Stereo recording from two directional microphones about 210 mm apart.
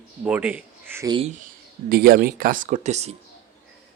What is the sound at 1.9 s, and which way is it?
Speech, 45° right (ahead or behind).